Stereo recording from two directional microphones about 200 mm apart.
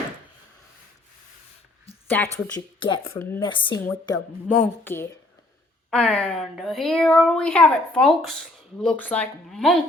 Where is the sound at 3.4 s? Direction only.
25° left (ahead or behind).